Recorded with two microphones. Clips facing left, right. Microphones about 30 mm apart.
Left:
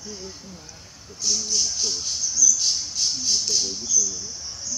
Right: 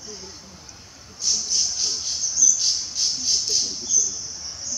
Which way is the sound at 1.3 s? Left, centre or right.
Centre.